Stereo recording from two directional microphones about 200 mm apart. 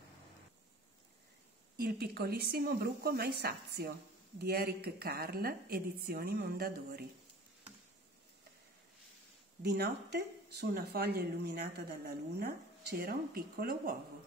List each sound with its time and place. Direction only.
1.8 s a woman's voice: 50° right (ahead or behind)
9.6 s a woman's voice: 55° right (ahead or behind)